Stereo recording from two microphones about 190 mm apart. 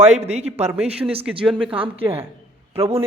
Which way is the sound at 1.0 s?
10° right (ahead or behind).